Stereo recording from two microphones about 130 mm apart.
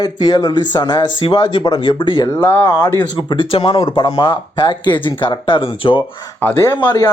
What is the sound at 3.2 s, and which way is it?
Speech, 40° left (ahead or behind).